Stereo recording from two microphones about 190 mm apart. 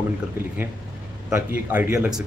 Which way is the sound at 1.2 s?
10° right (ahead or behind).